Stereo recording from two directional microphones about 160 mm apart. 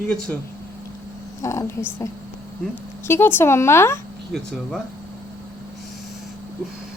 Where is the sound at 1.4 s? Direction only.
20° left (ahead or behind).